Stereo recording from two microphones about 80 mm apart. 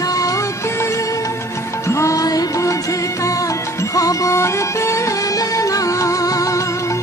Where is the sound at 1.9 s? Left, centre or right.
Left.